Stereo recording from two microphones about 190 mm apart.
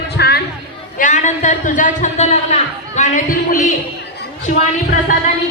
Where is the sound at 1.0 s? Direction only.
40° left (ahead or behind).